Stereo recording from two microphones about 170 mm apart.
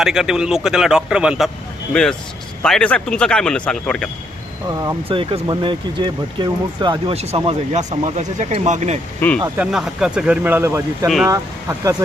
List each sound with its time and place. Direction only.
0.0 s speech: 5° right (ahead or behind)
5.0 s speech: 30° right (ahead or behind)
7.2 s speech: 35° right (ahead or behind)
9.6 s speech: 5° right (ahead or behind); by 12.0 s 20° right (ahead or behind)